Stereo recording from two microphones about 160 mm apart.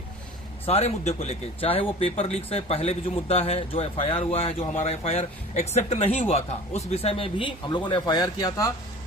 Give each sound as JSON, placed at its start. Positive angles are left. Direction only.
{"t": 0.6, "sound": "speech", "side_deg": 40}